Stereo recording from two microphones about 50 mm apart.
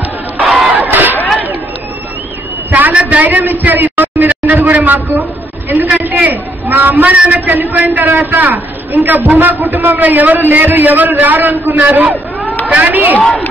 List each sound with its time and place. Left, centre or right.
0.4 s battle cry: centre
2.7 s a sound: right
7.4 s a man's voice: right